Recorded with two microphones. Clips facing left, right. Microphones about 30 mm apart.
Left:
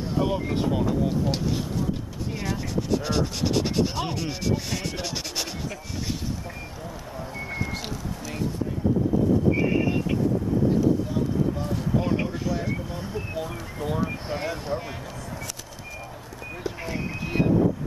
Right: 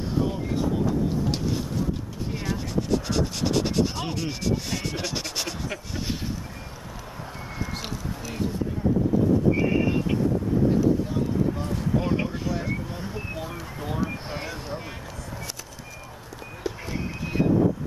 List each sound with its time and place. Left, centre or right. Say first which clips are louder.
0.2 s speech: left 3 dB; left
1.3 s speech: even; centre
7.5 s music: even; centre
9.6 s vehicle: even; centre
11.5 s speech: even; centre
16.9 s vehicle: left 3 dB; centre